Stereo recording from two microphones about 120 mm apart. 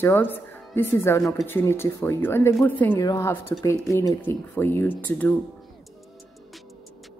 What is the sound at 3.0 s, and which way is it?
Speech, 25° left (ahead or behind).